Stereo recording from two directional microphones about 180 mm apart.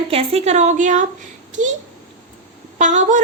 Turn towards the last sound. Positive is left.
turn(degrees=-45)  # may be behind; listen again after turning